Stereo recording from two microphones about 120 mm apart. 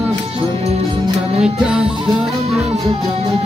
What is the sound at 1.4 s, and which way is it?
Music, 5° right (ahead or behind).